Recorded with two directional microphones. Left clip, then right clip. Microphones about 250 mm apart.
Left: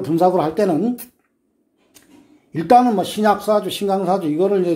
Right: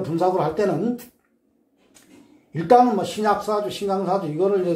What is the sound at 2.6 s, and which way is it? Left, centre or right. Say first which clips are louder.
Speech: left 2 dB; left.